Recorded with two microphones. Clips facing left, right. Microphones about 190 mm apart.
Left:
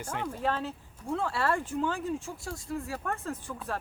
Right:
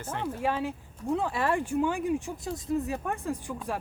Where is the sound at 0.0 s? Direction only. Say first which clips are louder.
Right 1 dB; 10° left (ahead or behind).